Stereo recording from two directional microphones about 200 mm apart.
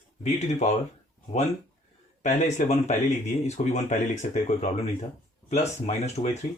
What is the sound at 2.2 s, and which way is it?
Speech, 35° left (ahead or behind).